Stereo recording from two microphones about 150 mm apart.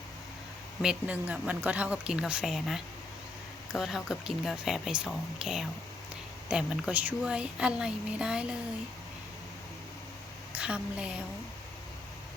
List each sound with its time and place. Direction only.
0.8 s a woman's voice: 5° right (ahead or behind)
10.5 s a woman's voice: 10° right (ahead or behind)